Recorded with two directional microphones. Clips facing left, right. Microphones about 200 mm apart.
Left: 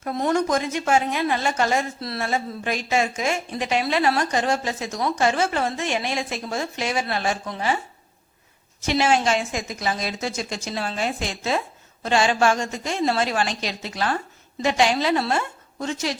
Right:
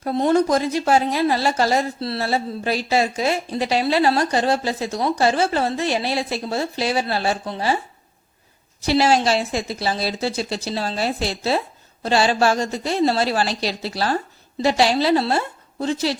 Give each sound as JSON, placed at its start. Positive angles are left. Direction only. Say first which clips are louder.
{"t": 0.0, "sound": "speech", "louder": "right 5 dB", "side_deg": -30}
{"t": 8.8, "sound": "speech", "louder": "right 3 dB", "side_deg": -35}